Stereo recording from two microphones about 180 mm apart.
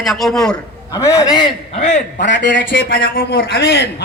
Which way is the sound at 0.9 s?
20° left (ahead or behind).